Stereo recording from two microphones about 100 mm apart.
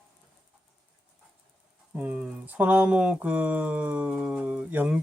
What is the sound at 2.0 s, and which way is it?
Speech, 15° right (ahead or behind).